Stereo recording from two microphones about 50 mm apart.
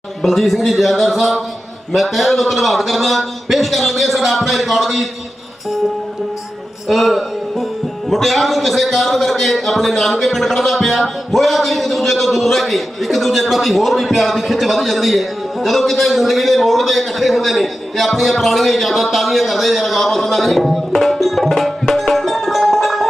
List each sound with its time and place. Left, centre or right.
0.2 s a man's voice: centre
6.8 s a man's voice: centre
20.9 s music: centre